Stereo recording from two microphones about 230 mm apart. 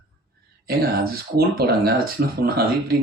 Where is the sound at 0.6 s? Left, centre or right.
Right.